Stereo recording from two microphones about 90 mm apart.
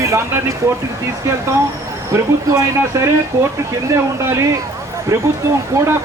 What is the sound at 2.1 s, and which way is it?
Speech, 35° right (ahead or behind).